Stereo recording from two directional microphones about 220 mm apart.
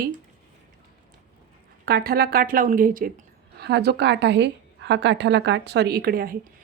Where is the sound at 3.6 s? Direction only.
50° right (ahead or behind).